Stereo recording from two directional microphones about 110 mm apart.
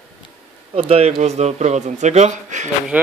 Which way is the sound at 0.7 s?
65° right (ahead or behind).